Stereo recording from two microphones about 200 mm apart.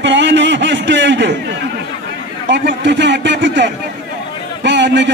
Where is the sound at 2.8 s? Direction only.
60° right (ahead or behind).